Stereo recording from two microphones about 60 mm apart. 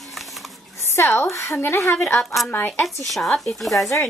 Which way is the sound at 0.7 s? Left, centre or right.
Left.